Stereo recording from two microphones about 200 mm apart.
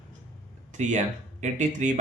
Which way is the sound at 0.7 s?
35° right (ahead or behind).